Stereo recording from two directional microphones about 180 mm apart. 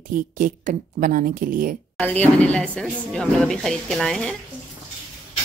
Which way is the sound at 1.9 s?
10° left (ahead or behind).